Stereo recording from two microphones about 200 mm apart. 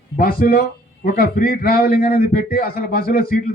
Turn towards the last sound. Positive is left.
turn(degrees=45)  # may be behind; listen again after turning